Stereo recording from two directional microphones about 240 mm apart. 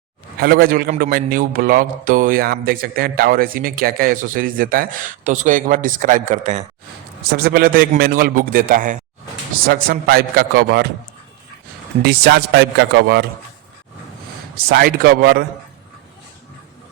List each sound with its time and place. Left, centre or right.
0.3 s a man's voice: right
12.0 s a man's voice: right
14.5 s a man's voice: right